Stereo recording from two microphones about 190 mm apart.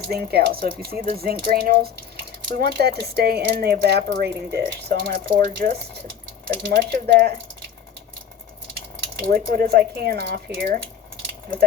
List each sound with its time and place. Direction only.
0.1 s speech: 55° right (ahead or behind)
9.3 s speech: 55° right (ahead or behind)